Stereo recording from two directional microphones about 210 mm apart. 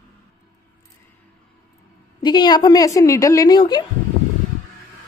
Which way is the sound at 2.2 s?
20° left (ahead or behind).